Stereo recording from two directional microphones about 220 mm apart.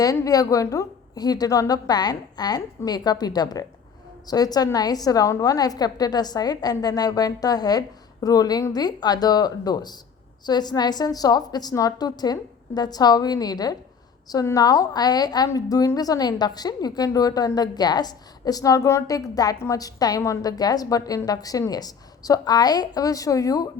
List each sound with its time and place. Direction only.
0.0 s a woman's voice: 15° left (ahead or behind)